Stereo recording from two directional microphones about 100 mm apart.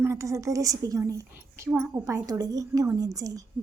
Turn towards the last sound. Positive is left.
turn(degrees=-35)  # may be behind; listen again after turning